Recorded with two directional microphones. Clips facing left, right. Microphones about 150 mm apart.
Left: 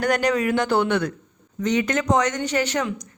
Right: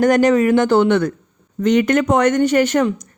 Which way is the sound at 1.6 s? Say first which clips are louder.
Right 7 dB; 55° right (ahead or behind).